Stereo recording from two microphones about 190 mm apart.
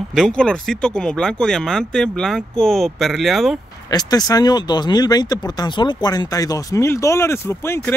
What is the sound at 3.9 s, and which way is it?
Speech, 20° left (ahead or behind).